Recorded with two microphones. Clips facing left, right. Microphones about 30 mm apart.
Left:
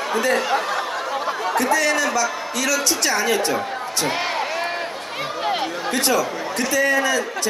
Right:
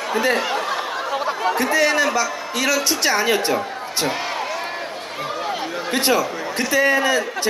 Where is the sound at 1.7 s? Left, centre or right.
Right.